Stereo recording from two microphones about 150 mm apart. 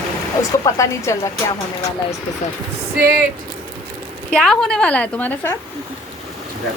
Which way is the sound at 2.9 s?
90° right.